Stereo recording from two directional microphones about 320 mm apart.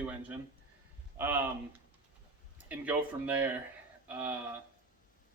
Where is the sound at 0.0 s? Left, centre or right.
Centre.